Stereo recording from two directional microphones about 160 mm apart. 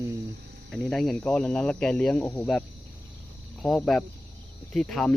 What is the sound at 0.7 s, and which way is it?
Speech, 5° left (ahead or behind).